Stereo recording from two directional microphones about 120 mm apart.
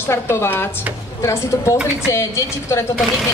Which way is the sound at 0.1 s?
20° left (ahead or behind).